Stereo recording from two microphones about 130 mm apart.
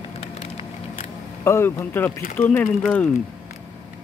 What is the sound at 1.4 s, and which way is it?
Speech, 20° left (ahead or behind).